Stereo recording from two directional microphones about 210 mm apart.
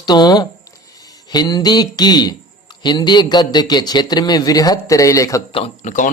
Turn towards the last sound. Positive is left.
turn(degrees=35)  # may be behind; listen again after turning